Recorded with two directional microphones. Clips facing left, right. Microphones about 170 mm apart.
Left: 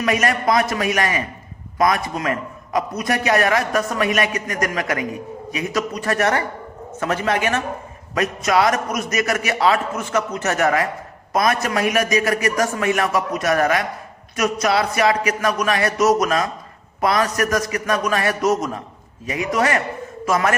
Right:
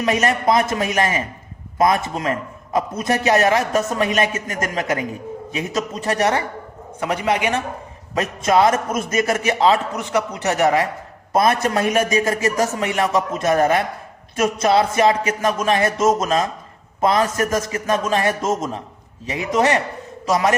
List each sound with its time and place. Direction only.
0.0 s a man's voice: 25° right (ahead or behind)
8.1 s a man's voice: 25° right (ahead or behind)